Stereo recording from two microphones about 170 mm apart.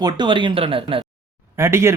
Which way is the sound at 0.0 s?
25° right (ahead or behind).